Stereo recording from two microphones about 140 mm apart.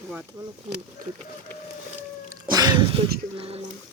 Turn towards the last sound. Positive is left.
turn(degrees=-45)  # may be behind; listen again after turning